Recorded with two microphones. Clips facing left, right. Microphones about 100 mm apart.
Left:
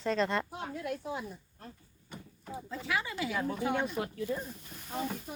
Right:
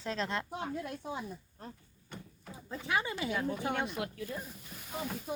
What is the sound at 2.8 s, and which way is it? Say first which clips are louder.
Speech: right 1 dB; 25° right (ahead or behind).